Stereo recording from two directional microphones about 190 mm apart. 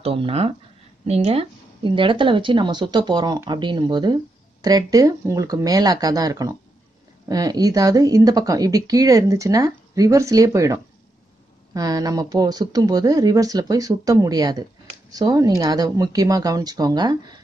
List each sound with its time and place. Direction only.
0.0 s speech: 30° right (ahead or behind)